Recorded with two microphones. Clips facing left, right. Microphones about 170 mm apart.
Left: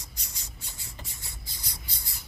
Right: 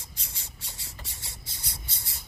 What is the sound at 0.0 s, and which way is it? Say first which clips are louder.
Cricket: even; 30° right (ahead or behind).